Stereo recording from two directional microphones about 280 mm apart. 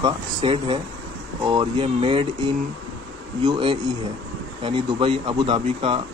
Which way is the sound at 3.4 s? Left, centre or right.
Centre.